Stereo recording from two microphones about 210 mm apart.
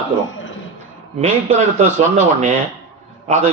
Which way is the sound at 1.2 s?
35° right (ahead or behind).